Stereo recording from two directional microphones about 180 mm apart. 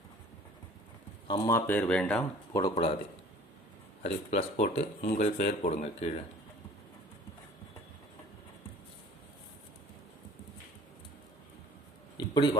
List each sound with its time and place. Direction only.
1.3 s speech: 15° left (ahead or behind)
2.5 s speech: 20° left (ahead or behind)
4.0 s speech: 35° left (ahead or behind)
12.1 s a sound: 25° left (ahead or behind)